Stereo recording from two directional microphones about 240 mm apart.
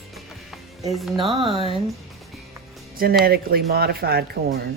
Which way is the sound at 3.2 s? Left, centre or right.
Right.